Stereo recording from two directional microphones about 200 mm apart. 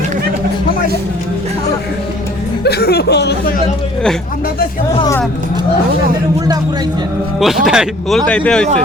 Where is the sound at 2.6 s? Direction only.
55° left (ahead or behind).